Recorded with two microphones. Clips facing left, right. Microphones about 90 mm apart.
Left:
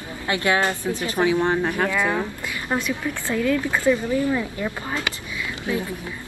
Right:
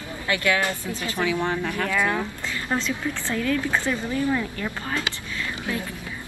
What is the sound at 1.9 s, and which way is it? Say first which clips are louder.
A woman's voice: left 1 dB; 20° left (ahead or behind).